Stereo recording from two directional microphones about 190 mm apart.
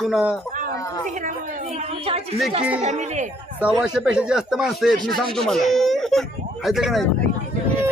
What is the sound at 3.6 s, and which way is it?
Speech, 5° right (ahead or behind).